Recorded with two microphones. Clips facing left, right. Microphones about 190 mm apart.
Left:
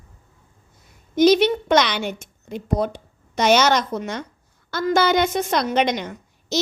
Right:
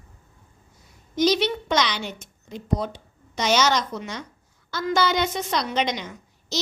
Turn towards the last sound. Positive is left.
turn(degrees=55)  # may be behind; listen again after turning